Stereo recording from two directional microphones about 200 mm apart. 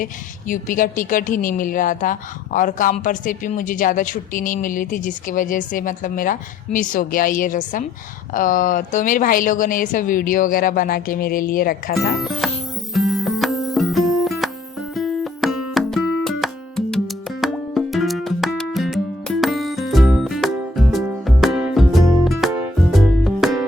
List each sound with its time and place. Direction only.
0.0 s a woman's voice: 40° left (ahead or behind)
11.9 s speech: centre (ahead or behind)
12.9 s music: centre (ahead or behind)